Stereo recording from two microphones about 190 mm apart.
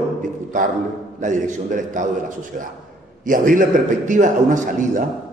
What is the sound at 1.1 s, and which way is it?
Speech, 40° right (ahead or behind).